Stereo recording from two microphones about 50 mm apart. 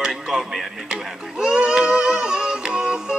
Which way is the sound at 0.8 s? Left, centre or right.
Centre.